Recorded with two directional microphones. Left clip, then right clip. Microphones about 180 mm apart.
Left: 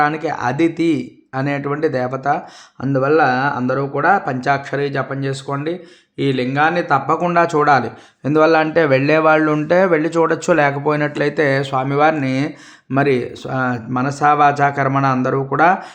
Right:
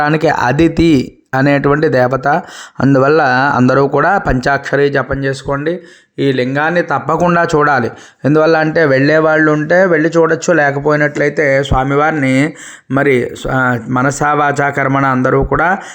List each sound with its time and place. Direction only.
0.0 s speech: 50° right (ahead or behind); by 15.8 s 30° right (ahead or behind)